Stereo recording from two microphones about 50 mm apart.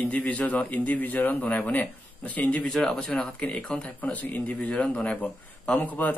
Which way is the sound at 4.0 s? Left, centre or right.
Left.